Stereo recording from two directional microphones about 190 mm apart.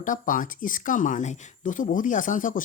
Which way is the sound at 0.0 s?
45° left (ahead or behind).